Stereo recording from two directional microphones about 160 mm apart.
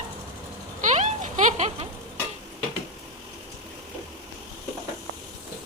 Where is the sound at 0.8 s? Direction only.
50° right (ahead or behind).